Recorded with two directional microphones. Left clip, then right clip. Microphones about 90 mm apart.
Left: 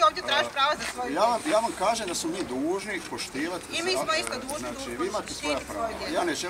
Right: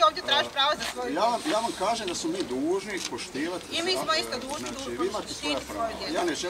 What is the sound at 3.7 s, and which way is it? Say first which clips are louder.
Speech: even; 5° right (ahead or behind).